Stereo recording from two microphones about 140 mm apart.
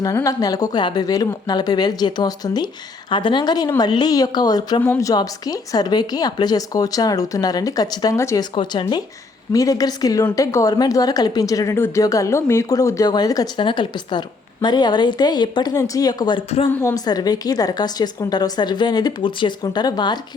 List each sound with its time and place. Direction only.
0.0 s a woman's voice: 20° left (ahead or behind)
8.5 s a woman's voice: 35° left (ahead or behind)